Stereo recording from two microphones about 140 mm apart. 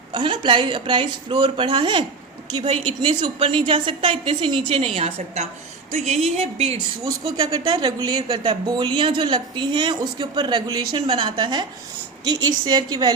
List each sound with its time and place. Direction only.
0.1 s a woman's voice: 35° right (ahead or behind)
7.0 s a woman's voice: 25° right (ahead or behind)